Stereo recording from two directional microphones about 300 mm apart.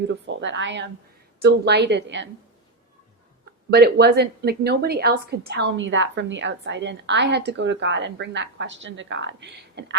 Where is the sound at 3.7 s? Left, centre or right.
Right.